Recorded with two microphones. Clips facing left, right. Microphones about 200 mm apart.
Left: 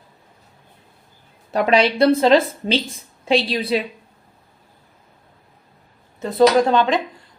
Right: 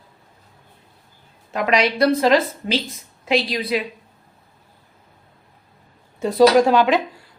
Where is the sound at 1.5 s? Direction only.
30° left (ahead or behind).